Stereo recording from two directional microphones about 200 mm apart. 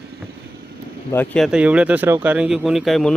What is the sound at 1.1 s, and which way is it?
Speech, 10° left (ahead or behind).